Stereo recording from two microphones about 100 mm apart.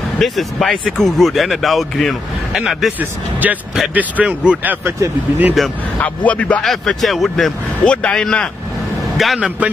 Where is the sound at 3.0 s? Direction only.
15° right (ahead or behind).